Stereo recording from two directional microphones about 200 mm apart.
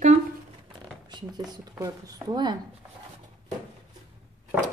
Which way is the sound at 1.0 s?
20° right (ahead or behind).